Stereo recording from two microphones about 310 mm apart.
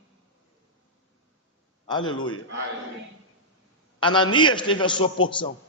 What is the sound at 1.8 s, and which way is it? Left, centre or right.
Speech, centre.